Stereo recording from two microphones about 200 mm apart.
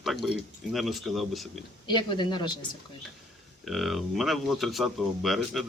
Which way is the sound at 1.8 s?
25° left (ahead or behind).